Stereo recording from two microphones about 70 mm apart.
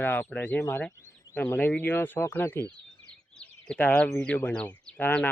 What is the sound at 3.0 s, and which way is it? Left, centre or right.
Bird, centre.